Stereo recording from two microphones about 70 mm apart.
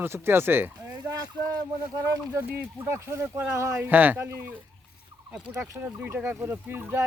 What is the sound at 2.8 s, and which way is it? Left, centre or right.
Speech, right.